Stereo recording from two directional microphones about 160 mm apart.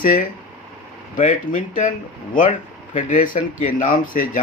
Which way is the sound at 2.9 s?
55° left (ahead or behind).